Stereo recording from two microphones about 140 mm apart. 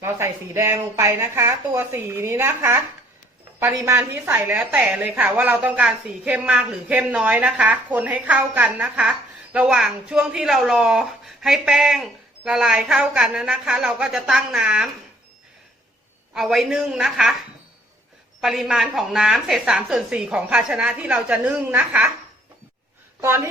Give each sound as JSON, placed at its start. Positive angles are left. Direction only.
{"t": 0.0, "sound": "a woman's voice", "side_deg": -20}
{"t": 16.3, "sound": "a woman's voice", "side_deg": 0}
{"t": 18.3, "sound": "a woman's voice", "side_deg": 0}
{"t": 23.2, "sound": "a woman's voice", "side_deg": -15}